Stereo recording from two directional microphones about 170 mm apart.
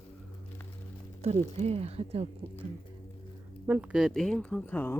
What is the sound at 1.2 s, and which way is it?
Speech, 40° right (ahead or behind).